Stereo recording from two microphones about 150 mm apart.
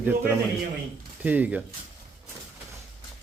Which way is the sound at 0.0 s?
15° right (ahead or behind).